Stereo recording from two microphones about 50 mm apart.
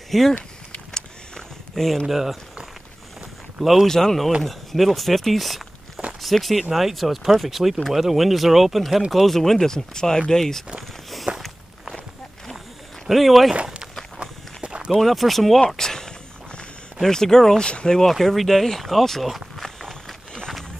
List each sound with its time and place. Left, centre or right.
0.1 s speech: centre
0.9 s a sound: centre
2.0 s speech: centre
3.8 s speech: centre
10.8 s walk: centre
13.0 s speech: centre
14.2 s walk: centre
15.0 s speech: centre
15.7 s a sound: centre
17.6 s speech: centre
18.0 s a sound: centre